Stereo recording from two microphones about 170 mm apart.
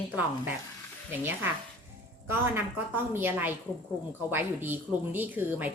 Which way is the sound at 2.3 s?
10° right (ahead or behind).